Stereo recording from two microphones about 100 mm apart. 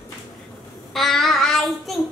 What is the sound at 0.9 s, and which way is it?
Child singing, 5° left (ahead or behind).